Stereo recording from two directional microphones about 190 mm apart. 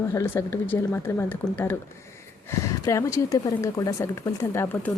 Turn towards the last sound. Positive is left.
turn(degrees=10)  # may be behind; listen again after turning